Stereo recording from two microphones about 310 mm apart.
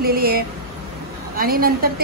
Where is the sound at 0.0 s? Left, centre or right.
Right.